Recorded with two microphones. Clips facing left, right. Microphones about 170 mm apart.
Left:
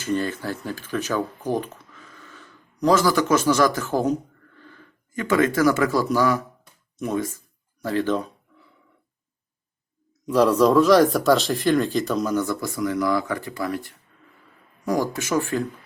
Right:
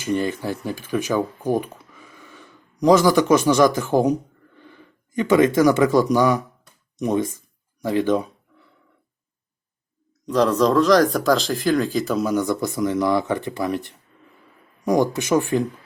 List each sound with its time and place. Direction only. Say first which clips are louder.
0.0 s speech: right 2 dB; 15° right (ahead or behind)
10.2 s speech: left 1 dB; 10° left (ahead or behind); by 15.6 s 20° right (ahead or behind)